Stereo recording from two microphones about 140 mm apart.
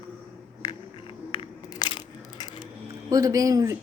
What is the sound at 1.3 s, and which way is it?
Crushing, 35° left (ahead or behind).